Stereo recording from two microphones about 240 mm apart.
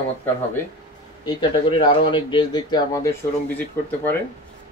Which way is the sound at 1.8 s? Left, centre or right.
Centre.